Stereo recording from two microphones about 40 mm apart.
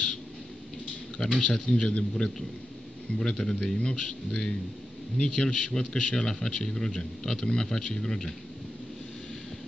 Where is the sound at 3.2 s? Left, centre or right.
Centre.